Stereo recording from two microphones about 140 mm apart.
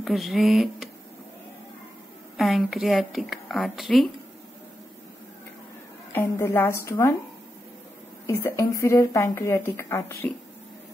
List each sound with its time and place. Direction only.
0.0 s a woman's voice: centre (ahead or behind)
2.3 s a woman's voice: centre (ahead or behind)
6.1 s speech: 20° left (ahead or behind)
8.3 s speech: 20° left (ahead or behind)